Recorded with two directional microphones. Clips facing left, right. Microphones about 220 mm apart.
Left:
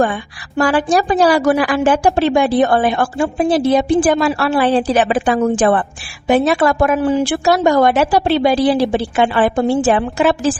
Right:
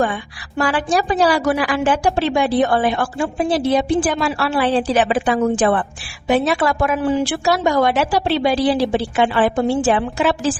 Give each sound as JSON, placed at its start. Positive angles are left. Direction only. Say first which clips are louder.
{"t": 0.6, "sound": "a woman's voice", "louder": "left 4 dB", "side_deg": 45}